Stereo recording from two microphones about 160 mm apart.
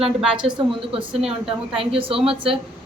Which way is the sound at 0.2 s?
5° right (ahead or behind).